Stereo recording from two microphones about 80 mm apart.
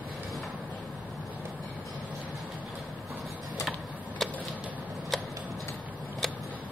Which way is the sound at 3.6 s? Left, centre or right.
Centre.